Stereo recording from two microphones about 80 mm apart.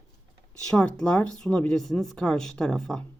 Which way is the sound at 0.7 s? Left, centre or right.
Centre.